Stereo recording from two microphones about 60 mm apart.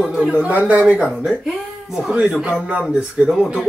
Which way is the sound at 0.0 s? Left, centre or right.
Centre.